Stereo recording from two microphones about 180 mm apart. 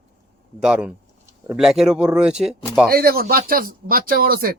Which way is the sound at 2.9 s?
55° right (ahead or behind).